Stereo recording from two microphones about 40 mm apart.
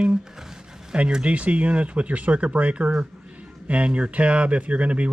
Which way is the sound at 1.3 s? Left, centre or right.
Right.